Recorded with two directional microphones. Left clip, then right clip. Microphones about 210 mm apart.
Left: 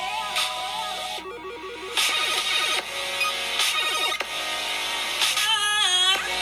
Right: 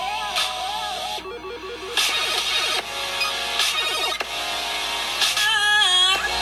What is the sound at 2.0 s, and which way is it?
Music, 10° left (ahead or behind).